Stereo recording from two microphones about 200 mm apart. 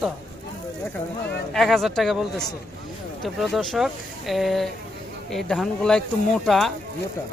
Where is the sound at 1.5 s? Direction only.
Centre (ahead or behind).